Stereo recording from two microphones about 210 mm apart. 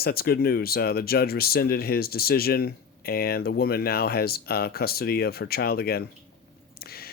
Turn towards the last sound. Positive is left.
turn(degrees=45)  # may be behind; listen again after turning